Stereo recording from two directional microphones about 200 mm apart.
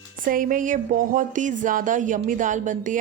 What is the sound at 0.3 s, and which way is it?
A woman's voice, 45° right (ahead or behind).